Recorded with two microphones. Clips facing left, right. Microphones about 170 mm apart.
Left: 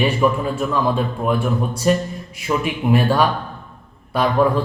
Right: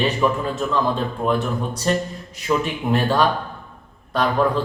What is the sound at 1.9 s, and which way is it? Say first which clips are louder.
Speech: left 4 dB; 10° left (ahead or behind).